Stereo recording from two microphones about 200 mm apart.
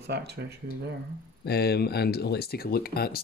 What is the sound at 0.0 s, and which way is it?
Speech, 55° right (ahead or behind).